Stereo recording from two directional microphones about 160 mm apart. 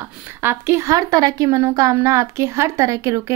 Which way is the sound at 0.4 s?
15° right (ahead or behind).